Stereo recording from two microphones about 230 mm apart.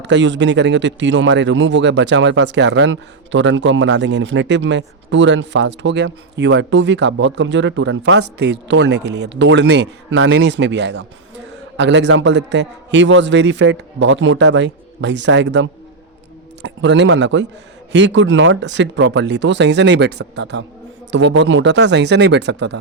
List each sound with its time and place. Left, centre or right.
0.0 s a man's voice: right